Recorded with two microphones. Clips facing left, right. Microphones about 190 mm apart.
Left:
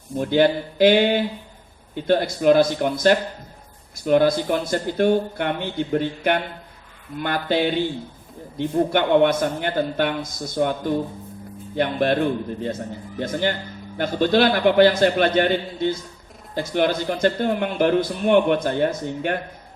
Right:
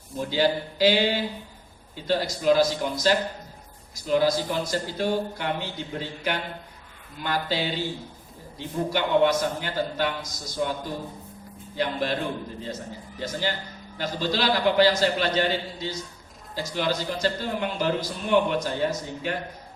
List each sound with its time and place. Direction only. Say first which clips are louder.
0.2 s speech: left 6 dB; 55° left (ahead or behind)
13.1 s speech: left 6 dB; 55° left (ahead or behind)